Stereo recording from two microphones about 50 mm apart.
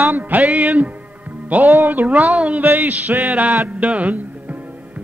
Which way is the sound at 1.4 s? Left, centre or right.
Right.